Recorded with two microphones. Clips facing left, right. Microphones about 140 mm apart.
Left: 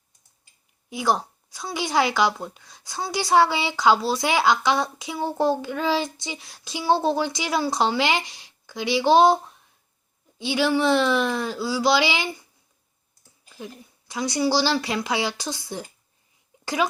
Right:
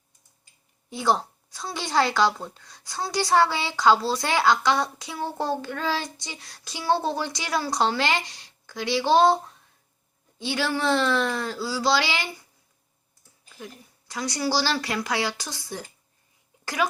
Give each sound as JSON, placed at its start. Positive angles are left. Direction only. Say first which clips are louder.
{"t": 0.9, "sound": "speech", "louder": "even", "side_deg": 5}
{"t": 14.1, "sound": "speech", "louder": "left 4 dB", "side_deg": 20}